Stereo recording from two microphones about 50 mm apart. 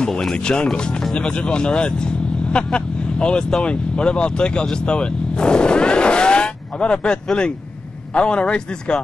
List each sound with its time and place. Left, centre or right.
0.0 s speech: centre